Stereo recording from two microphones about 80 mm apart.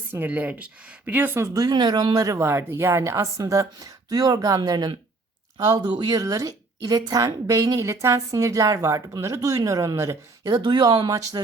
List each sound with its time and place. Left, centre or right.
0.1 s speech: right
1.5 s speech: right
2.2 s a woman's voice: right
5.5 s speech: right
5.8 s a woman's voice: right
10.5 s speech: right